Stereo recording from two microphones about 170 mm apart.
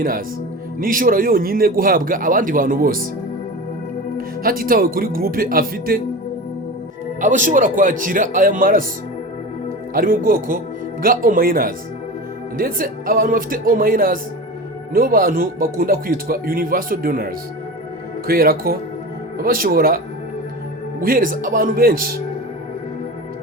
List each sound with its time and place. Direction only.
0.8 s speech: 55° right (ahead or behind)
4.4 s speech: 60° right (ahead or behind)
7.2 s speech: 50° right (ahead or behind)
9.9 s speech: 55° right (ahead or behind)
21.0 s speech: 55° right (ahead or behind)